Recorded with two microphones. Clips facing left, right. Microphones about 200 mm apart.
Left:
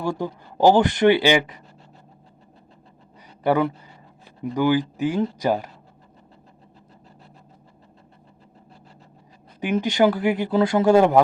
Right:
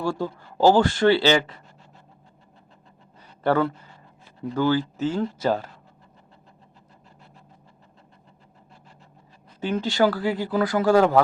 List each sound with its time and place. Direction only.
0.0 s speech: 20° left (ahead or behind)
3.4 s speech: 15° left (ahead or behind)
9.6 s speech: 20° left (ahead or behind)